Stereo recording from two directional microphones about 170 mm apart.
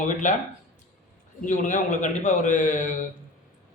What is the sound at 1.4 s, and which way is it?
A man's voice, 45° left (ahead or behind).